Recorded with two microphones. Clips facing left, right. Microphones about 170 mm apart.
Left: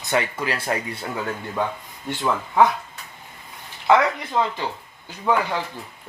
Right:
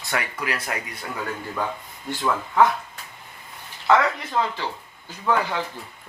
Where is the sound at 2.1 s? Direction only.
20° left (ahead or behind).